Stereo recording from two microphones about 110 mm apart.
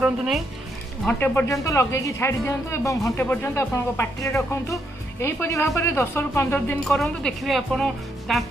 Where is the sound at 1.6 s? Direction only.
25° left (ahead or behind).